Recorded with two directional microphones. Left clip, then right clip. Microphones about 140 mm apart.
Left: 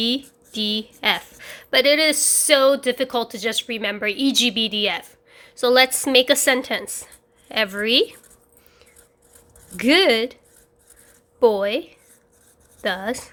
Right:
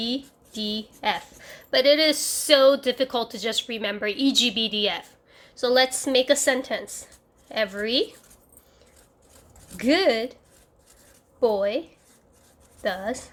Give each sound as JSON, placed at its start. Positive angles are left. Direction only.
{"t": 0.0, "sound": "a woman's voice", "side_deg": 45}
{"t": 9.7, "sound": "speech", "side_deg": 45}
{"t": 11.3, "sound": "a woman's voice", "side_deg": 45}